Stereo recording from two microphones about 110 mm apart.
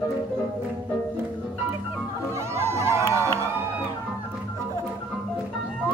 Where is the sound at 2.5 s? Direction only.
25° right (ahead or behind).